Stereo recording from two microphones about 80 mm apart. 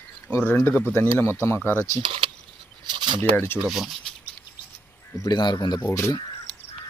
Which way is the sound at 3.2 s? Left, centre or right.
Left.